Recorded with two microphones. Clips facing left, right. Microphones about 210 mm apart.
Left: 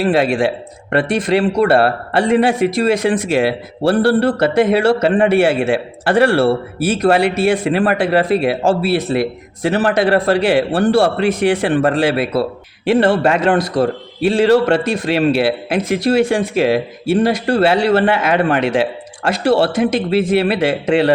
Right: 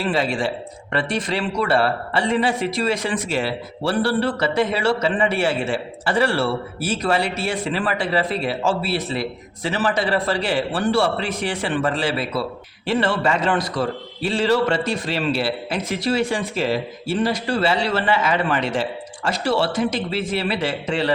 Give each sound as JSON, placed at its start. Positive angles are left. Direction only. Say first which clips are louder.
{"t": 0.0, "sound": "a man's voice", "louder": "left 7 dB", "side_deg": 60}